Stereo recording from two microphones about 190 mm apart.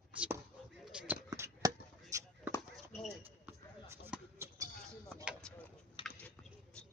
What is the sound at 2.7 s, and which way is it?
Clip-clop, centre (ahead or behind).